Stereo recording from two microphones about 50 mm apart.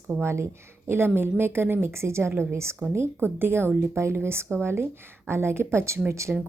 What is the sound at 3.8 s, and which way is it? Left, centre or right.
Speech, right.